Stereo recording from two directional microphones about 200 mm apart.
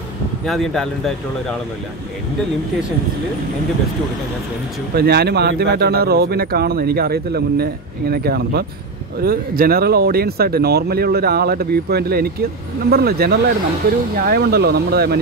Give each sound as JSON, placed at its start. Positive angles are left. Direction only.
{"t": 0.5, "sound": "speech", "side_deg": 0}
{"t": 4.9, "sound": "speech", "side_deg": -55}